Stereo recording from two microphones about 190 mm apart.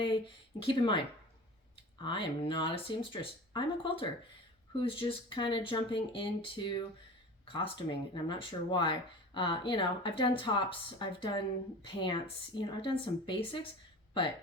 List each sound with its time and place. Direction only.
0.0 s speech: 25° left (ahead or behind)
2.0 s speech: 25° left (ahead or behind)